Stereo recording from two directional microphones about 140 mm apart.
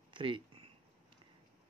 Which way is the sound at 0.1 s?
35° right (ahead or behind).